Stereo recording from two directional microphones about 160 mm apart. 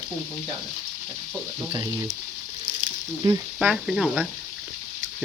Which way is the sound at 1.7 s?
20° right (ahead or behind).